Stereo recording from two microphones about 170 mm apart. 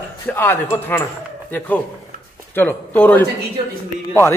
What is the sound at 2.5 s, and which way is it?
Speech, 10° left (ahead or behind).